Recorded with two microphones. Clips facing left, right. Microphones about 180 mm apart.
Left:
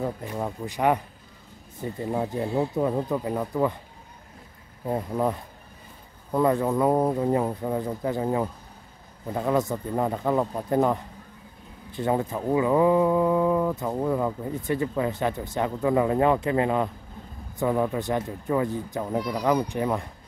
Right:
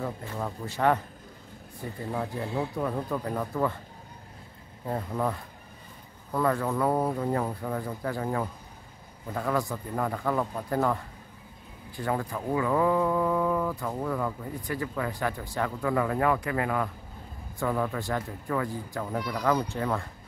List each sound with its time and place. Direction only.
0.0 s speech: 15° left (ahead or behind)
4.8 s speech: 20° left (ahead or behind)